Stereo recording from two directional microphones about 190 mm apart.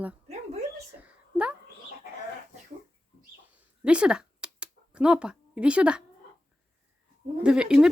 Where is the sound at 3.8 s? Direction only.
5° right (ahead or behind).